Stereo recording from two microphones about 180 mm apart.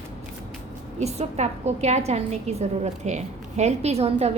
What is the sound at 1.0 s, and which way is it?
A woman's voice, 35° right (ahead or behind).